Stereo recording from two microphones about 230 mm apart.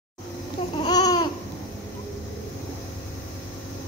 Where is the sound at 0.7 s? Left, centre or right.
Centre.